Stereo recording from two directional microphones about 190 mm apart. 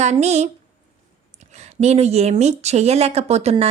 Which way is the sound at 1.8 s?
35° right (ahead or behind).